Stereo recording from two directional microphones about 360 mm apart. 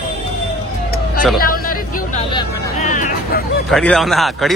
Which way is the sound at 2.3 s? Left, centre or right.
Centre.